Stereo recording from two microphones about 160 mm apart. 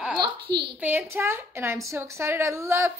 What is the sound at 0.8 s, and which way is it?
A woman's voice, 10° right (ahead or behind).